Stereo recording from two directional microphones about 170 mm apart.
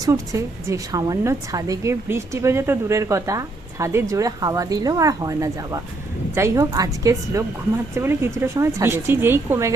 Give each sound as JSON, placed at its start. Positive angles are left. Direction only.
{"t": 0.0, "sound": "a woman's voice", "side_deg": -20}